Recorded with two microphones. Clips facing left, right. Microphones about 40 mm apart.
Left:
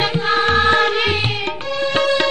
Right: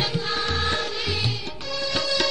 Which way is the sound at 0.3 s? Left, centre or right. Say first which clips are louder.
Left 14 dB; left.